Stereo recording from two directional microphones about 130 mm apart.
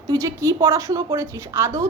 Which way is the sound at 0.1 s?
25° right (ahead or behind).